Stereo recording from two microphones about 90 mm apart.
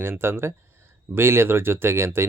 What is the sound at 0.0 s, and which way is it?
Speech, 25° right (ahead or behind).